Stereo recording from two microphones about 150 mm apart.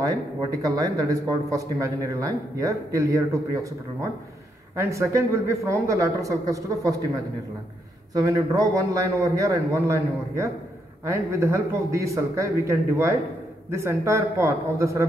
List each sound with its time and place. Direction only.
0.0 s speech: 25° right (ahead or behind)